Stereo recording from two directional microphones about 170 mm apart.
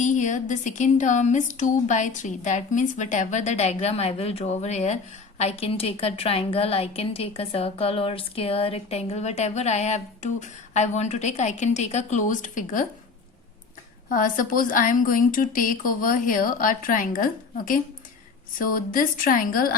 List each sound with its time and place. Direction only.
0.0 s a woman's voice: 45° left (ahead or behind)
14.1 s a woman's voice: 55° left (ahead or behind)
18.6 s a woman's voice: 55° left (ahead or behind)